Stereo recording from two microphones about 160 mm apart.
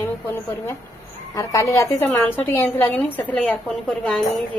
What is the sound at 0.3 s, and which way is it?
A woman's voice, 15° left (ahead or behind).